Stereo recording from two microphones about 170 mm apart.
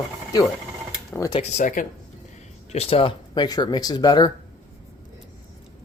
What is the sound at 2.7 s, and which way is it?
Speech, 35° left (ahead or behind).